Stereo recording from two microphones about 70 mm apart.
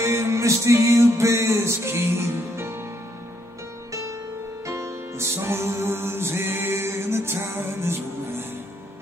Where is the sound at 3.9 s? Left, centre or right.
Right.